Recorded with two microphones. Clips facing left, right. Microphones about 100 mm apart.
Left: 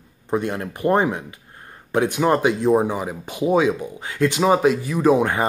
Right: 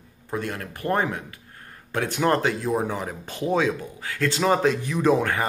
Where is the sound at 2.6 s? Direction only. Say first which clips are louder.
Left 7 dB; 25° left (ahead or behind).